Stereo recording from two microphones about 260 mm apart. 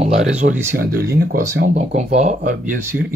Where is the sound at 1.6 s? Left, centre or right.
Right.